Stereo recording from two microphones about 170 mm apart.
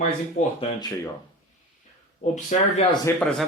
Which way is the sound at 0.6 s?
25° left (ahead or behind).